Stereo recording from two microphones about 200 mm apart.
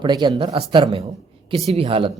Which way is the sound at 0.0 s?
20° right (ahead or behind).